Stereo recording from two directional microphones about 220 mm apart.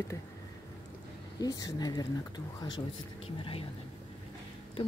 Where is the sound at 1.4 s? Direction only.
15° left (ahead or behind).